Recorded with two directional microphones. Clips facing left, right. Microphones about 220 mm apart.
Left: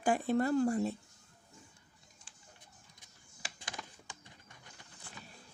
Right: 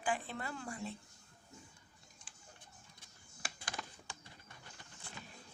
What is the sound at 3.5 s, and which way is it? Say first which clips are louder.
Typing: right 1 dB; 15° left (ahead or behind).